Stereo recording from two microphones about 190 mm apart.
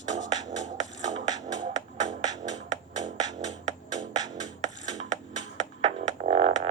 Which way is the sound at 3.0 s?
40° right (ahead or behind).